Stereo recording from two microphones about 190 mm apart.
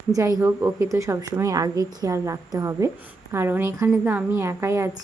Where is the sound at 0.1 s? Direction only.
15° right (ahead or behind).